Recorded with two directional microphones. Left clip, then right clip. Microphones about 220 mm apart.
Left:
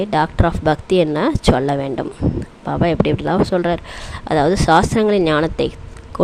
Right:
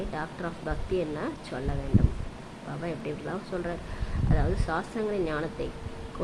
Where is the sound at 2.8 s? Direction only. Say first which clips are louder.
Left 18 dB; 45° left (ahead or behind).